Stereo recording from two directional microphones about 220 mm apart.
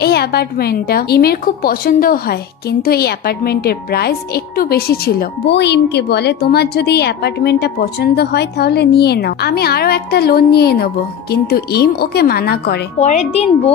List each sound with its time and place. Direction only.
0.0 s a woman's voice: 45° left (ahead or behind)
13.0 s speech: 30° left (ahead or behind)